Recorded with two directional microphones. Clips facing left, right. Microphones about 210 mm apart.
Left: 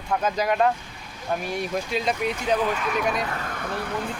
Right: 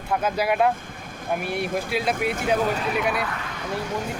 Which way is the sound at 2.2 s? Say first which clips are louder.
Right 1 dB; 50° right (ahead or behind).